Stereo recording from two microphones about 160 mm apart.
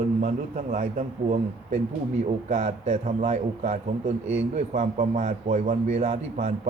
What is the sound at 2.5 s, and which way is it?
A man's voice, 50° right (ahead or behind).